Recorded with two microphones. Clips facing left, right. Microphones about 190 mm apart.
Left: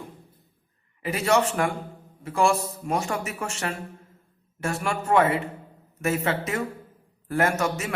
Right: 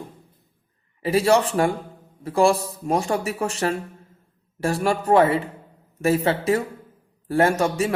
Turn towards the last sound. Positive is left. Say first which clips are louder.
# right 5 dB
turn(degrees=-30)  # may be behind; listen again after turning